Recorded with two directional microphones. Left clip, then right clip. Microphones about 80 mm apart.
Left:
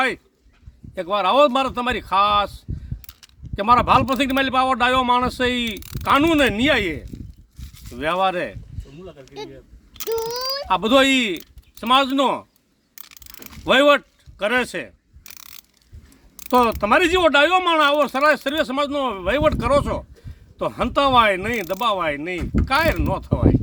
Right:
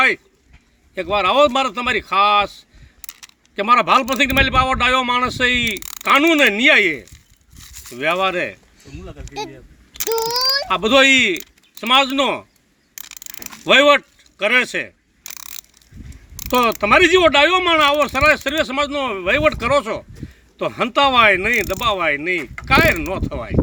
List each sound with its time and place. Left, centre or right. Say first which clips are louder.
0.9 s a man's voice: right 2 dB; left
10.7 s speech: right 2 dB; left
13.7 s speech: right 3 dB; left
16.5 s speech: right 2 dB; left